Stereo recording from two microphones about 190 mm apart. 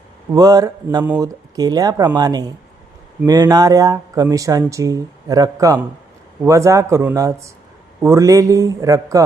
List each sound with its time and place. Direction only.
0.3 s speech: 20° right (ahead or behind)